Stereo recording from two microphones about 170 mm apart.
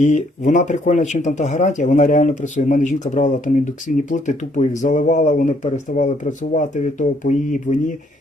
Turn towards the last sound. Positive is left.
turn(degrees=50)  # may be behind; listen again after turning